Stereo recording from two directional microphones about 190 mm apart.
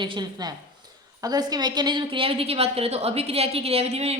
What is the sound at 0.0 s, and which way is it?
A woman's voice, 25° right (ahead or behind).